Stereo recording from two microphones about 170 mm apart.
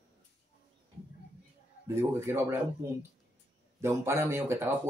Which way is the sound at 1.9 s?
15° right (ahead or behind).